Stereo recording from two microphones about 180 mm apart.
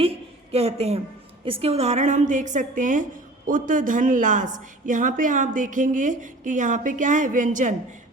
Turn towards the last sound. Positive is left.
turn(degrees=-45)  # may be behind; listen again after turning